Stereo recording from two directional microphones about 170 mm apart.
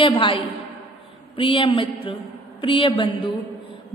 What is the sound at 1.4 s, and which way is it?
A woman's voice, 30° left (ahead or behind).